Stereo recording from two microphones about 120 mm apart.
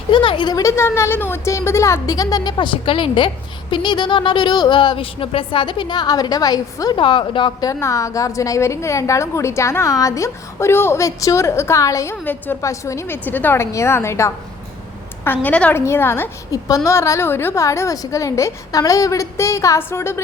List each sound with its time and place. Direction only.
0.1 s a woman's voice: 45° left (ahead or behind)
7.0 s a woman's voice: 45° left (ahead or behind)
7.6 s a woman's voice: 25° left (ahead or behind)
12.2 s a woman's voice: 15° left (ahead or behind)
16.5 s a woman's voice: 30° left (ahead or behind)